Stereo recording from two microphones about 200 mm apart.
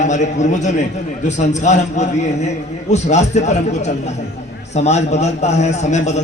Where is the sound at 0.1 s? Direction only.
35° left (ahead or behind).